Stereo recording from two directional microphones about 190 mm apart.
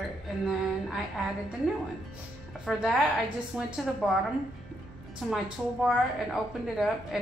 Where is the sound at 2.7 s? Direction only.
5° right (ahead or behind).